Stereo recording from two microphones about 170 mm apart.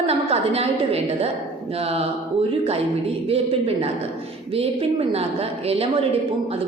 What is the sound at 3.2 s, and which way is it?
A woman's voice, 35° right (ahead or behind).